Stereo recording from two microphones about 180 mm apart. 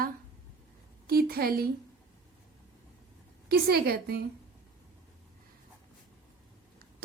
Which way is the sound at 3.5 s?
60° right (ahead or behind).